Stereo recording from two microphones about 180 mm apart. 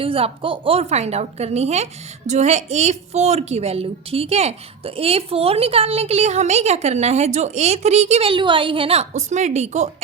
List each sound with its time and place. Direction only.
0.0 s a woman's voice: 30° right (ahead or behind)